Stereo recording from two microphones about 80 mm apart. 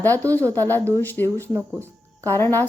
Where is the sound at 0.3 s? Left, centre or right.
Right.